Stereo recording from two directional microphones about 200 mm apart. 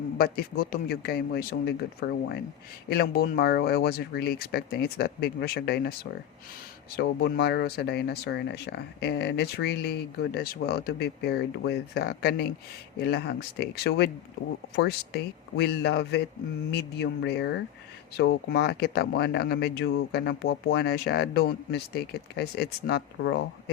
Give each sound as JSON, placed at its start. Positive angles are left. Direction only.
{"t": 0.2, "sound": "a man's voice", "side_deg": 50}